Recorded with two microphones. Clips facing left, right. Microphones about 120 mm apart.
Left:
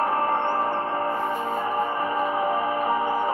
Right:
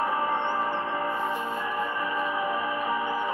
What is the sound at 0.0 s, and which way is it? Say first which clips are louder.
Music: left 4 dB; 50° left (ahead or behind).